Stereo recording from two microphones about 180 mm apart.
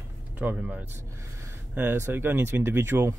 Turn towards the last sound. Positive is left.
turn(degrees=-15)  # may be behind; listen again after turning